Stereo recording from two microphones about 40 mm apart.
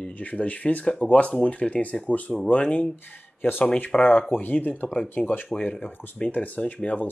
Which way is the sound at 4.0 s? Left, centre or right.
Left.